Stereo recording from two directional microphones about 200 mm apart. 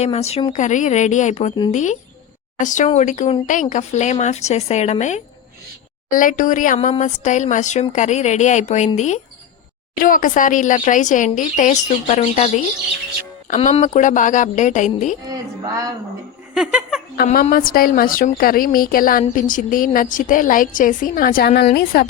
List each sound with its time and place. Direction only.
0.0 s a woman's voice: 30° left (ahead or behind)
15.3 s a woman's voice: 20° right (ahead or behind)
16.6 s speech: centre (ahead or behind)
17.2 s a woman's voice: 40° left (ahead or behind)